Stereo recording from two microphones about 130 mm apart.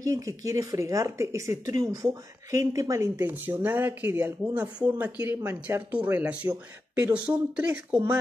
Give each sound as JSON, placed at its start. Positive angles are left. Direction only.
{"t": 0.0, "sound": "speech", "side_deg": -25}